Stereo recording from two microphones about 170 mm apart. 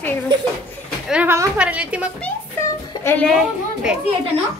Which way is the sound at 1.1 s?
10° right (ahead or behind).